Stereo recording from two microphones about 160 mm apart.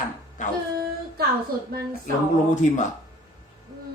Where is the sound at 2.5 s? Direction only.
50° left (ahead or behind).